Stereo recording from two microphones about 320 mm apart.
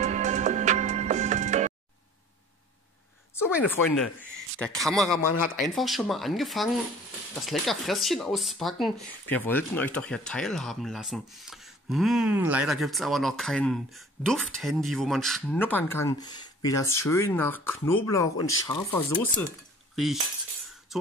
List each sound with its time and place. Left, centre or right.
0.0 s music: right
3.7 s speech: centre
20.9 s music: centre